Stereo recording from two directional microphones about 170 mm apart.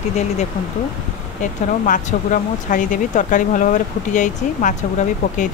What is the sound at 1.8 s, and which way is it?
Speech, 50° left (ahead or behind).